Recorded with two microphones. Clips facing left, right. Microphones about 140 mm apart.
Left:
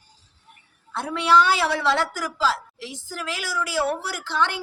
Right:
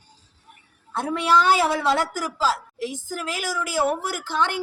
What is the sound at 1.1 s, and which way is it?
A man's voice, 45° right (ahead or behind).